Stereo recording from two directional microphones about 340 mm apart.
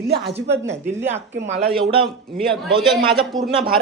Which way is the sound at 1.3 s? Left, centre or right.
Centre.